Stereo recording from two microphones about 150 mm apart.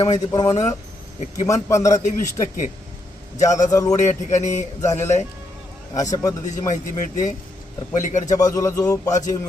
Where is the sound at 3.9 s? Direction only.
50° left (ahead or behind).